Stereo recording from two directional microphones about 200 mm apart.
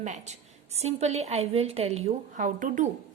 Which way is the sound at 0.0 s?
35° right (ahead or behind).